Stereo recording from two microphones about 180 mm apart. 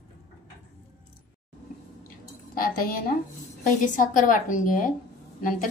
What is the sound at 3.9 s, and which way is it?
Speech, 45° left (ahead or behind).